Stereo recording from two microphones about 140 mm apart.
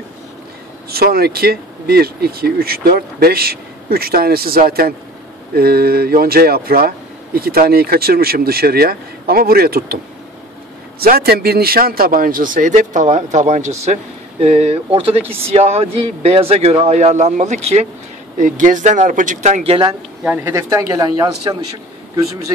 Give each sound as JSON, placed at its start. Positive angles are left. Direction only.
{"t": 0.8, "sound": "speech", "side_deg": -90}
{"t": 11.0, "sound": "a man's voice", "side_deg": -90}
{"t": 14.4, "sound": "speech", "side_deg": -45}
{"t": 19.6, "sound": "speech", "side_deg": -45}
{"t": 20.2, "sound": "speech", "side_deg": -15}